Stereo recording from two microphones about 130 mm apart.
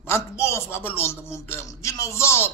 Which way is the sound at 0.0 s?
20° left (ahead or behind).